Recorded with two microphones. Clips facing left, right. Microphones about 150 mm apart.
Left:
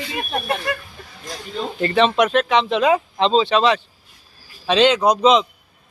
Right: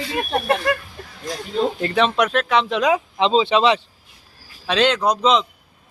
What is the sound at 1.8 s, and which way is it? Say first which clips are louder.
A man's voice: left 6 dB; centre (ahead or behind).